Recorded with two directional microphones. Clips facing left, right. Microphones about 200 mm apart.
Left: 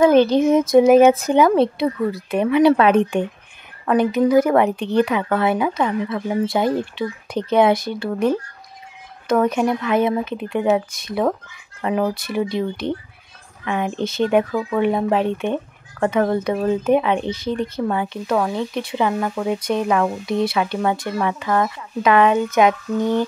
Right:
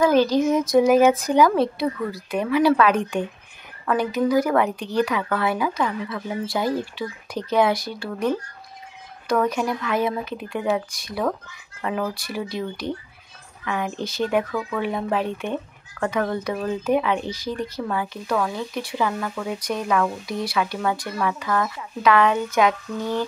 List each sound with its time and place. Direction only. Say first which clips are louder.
0.0 s speech: left 4 dB; 25° left (ahead or behind)
9.3 s speech: left 4 dB; 25° left (ahead or behind)